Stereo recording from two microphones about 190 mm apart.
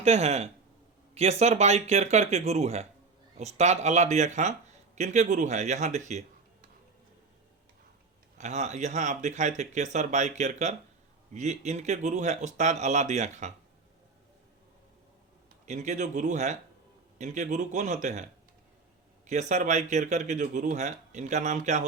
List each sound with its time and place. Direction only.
0.0 s speech: 35° right (ahead or behind)
8.4 s speech: 35° right (ahead or behind)
15.6 s speech: 40° right (ahead or behind)